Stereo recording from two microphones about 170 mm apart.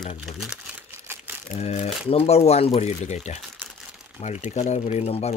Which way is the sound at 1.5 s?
40° left (ahead or behind).